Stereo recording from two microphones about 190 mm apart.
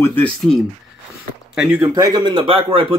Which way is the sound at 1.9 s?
20° right (ahead or behind).